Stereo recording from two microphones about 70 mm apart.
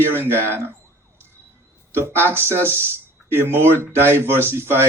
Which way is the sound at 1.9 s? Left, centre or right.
Right.